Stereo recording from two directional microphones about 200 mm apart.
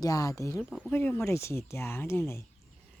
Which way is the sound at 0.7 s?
5° left (ahead or behind).